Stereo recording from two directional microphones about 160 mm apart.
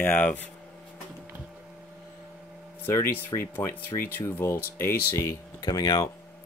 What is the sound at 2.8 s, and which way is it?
Speech, 15° left (ahead or behind).